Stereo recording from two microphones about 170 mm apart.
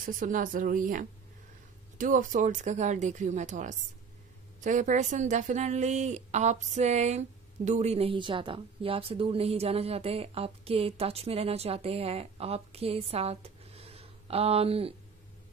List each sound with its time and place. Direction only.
0.0 s speech: 50° right (ahead or behind); by 15.0 s 35° right (ahead or behind)